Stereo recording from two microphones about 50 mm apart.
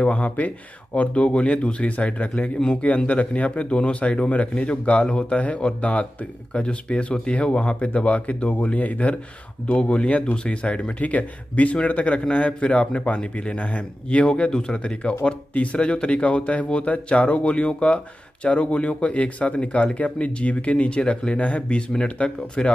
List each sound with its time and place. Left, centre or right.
0.0 s speech: left